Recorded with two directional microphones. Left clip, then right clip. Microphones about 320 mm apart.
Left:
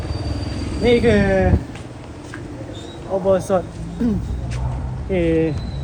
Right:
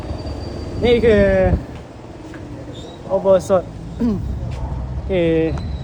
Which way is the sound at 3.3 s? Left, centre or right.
Centre.